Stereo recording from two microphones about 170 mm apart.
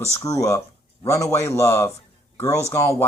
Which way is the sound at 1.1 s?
20° left (ahead or behind).